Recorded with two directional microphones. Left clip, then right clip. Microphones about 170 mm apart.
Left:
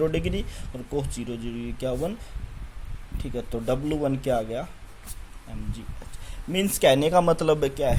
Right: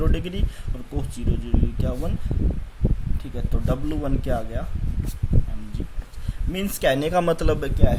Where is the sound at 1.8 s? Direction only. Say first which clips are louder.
Left 3 dB; 25° left (ahead or behind).